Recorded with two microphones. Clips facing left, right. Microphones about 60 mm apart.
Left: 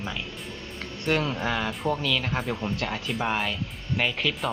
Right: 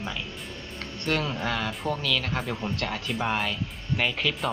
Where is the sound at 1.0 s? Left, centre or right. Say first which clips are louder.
Left 2 dB; centre.